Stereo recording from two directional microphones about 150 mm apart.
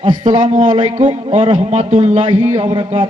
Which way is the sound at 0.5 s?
60° right (ahead or behind).